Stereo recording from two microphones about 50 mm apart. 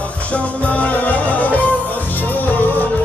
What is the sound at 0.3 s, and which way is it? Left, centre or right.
Music, left.